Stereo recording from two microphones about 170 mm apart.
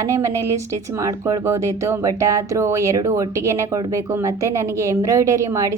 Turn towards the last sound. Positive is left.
turn(degrees=-20)  # may be behind; listen again after turning